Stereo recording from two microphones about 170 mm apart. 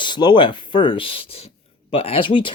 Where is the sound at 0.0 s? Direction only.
25° left (ahead or behind).